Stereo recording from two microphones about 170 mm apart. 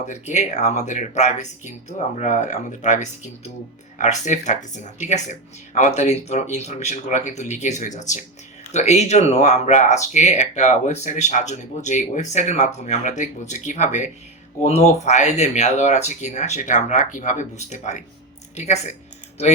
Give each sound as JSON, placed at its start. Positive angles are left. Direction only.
{"t": 0.0, "sound": "speech", "side_deg": 45}